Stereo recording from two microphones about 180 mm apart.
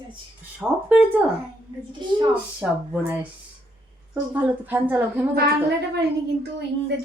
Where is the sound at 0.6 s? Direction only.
10° right (ahead or behind).